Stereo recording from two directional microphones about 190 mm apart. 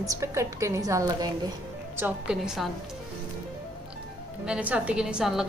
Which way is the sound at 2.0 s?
5° right (ahead or behind).